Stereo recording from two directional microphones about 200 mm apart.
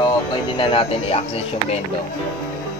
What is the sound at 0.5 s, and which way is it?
Speech, 25° left (ahead or behind).